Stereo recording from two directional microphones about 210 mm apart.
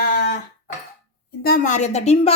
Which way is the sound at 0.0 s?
50° left (ahead or behind).